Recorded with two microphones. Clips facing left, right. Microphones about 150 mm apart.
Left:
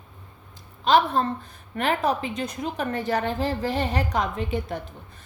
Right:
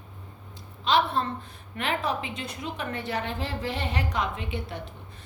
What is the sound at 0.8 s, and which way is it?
A woman's voice, 45° left (ahead or behind).